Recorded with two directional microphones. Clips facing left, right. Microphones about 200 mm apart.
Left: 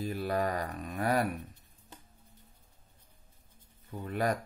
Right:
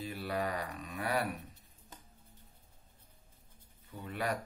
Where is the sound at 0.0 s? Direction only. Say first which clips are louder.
Left 5 dB; 45° left (ahead or behind).